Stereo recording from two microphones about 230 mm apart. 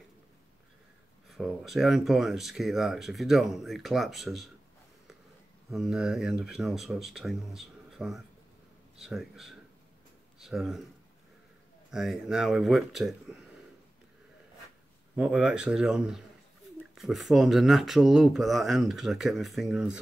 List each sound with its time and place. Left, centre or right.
1.3 s speech: centre
5.7 s speech: centre
11.9 s speech: centre
15.1 s speech: centre